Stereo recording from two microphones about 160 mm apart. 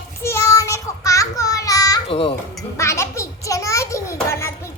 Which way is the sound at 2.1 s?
35° left (ahead or behind).